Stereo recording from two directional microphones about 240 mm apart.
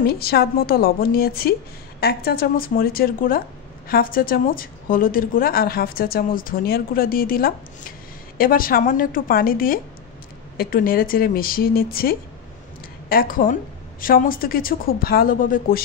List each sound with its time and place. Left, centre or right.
0.0 s a woman's voice: left